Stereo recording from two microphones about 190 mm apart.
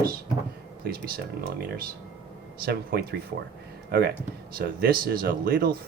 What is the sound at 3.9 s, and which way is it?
Speech, 55° right (ahead or behind).